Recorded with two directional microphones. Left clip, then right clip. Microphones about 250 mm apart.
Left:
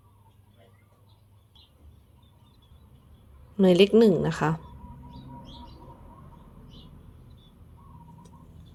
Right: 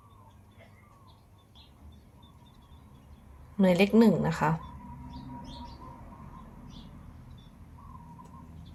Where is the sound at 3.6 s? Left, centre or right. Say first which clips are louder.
Left 5 dB; left.